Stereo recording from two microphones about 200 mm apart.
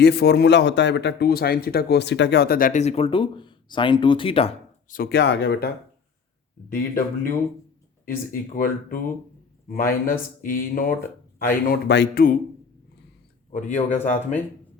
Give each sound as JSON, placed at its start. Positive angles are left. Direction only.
{"t": 0.0, "sound": "speech", "side_deg": 55}
{"t": 4.9, "sound": "speech", "side_deg": 50}
{"t": 8.0, "sound": "speech", "side_deg": 45}
{"t": 13.5, "sound": "speech", "side_deg": 40}